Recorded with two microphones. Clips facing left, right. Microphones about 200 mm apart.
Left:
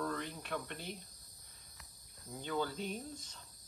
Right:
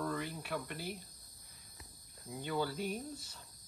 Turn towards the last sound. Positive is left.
turn(degrees=-5)  # may be behind; listen again after turning